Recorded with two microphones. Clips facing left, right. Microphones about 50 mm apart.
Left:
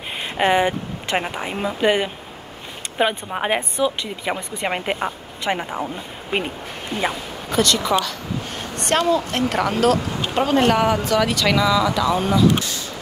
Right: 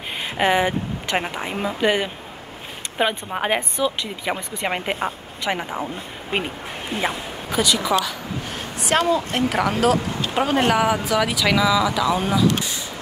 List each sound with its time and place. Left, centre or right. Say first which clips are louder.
0.4 s speech: left 1 dB; centre
7.0 s speech: left 1 dB; centre